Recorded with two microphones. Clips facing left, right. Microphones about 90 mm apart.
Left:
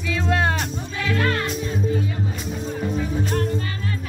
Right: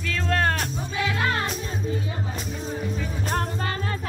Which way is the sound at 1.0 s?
15° right (ahead or behind).